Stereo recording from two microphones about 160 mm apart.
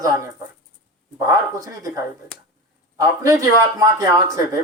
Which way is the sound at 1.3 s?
20° right (ahead or behind).